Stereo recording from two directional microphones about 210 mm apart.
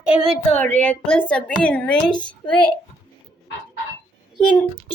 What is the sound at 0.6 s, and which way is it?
A woman's voice, 10° left (ahead or behind).